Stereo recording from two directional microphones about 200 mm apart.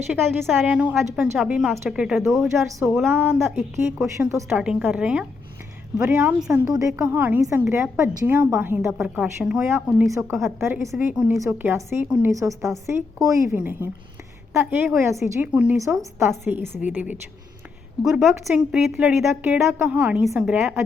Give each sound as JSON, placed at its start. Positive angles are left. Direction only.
{"t": 0.1, "sound": "a woman's voice", "side_deg": -5}